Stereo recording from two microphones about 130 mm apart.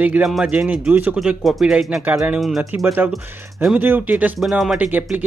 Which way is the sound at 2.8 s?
15° right (ahead or behind).